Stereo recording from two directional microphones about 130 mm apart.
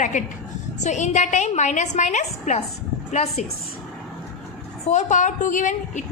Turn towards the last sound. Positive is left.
turn(degrees=70)  # may be behind; listen again after turning